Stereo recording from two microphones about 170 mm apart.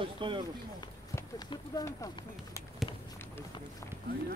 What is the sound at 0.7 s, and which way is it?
Speech, 25° left (ahead or behind).